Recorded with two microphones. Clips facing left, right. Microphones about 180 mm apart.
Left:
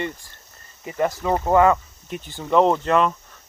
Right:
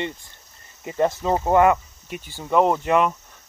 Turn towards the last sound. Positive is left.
turn(degrees=-10)  # may be behind; listen again after turning